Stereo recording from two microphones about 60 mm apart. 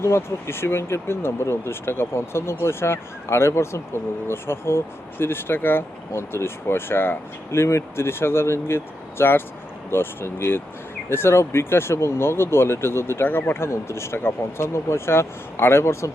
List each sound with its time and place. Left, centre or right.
0.0 s speech: left